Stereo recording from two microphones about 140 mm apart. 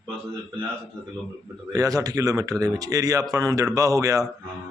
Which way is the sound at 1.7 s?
25° right (ahead or behind).